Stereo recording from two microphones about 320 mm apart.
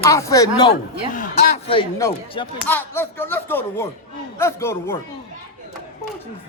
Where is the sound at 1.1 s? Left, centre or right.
Left.